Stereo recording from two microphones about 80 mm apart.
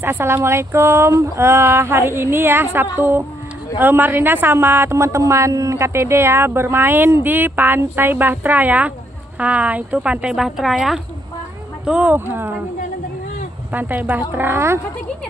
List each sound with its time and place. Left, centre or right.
0.0 s a woman's voice: right; by 11.0 s centre
11.8 s a woman's voice: centre
13.7 s a woman's voice: right